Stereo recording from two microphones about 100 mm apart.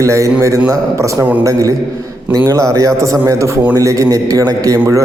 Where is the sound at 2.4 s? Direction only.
30° right (ahead or behind).